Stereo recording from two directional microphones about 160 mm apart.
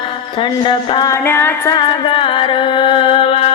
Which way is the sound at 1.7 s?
30° left (ahead or behind).